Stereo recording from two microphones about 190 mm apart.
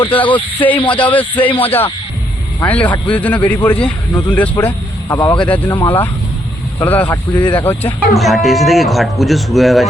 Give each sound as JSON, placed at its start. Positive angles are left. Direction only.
{"t": 0.0, "sound": "a man's voice", "side_deg": 10}
{"t": 4.5, "sound": "speech", "side_deg": 15}
{"t": 5.5, "sound": "a man's voice", "side_deg": 10}